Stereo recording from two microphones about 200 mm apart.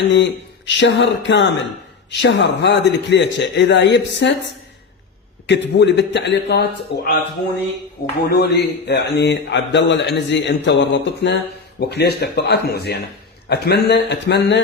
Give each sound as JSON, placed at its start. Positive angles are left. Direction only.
{"t": 0.0, "sound": "a man's voice", "side_deg": 65}
{"t": 5.5, "sound": "a man's voice", "side_deg": 60}
{"t": 8.3, "sound": "a man's voice", "side_deg": 55}